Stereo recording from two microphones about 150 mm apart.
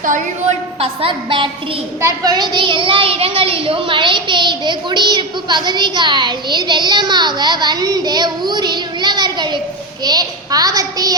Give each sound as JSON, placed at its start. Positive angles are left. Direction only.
{"t": 0.8, "sound": "a woman's voice", "side_deg": -35}
{"t": 2.0, "sound": "a child's voice", "side_deg": -20}